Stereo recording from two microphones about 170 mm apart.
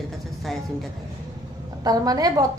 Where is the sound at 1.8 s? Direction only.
20° right (ahead or behind).